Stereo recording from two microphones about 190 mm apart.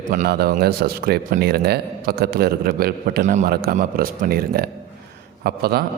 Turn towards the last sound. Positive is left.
turn(degrees=-55)  # may be behind; listen again after turning